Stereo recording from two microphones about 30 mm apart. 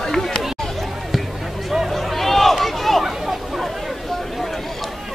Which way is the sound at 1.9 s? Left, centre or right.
Centre.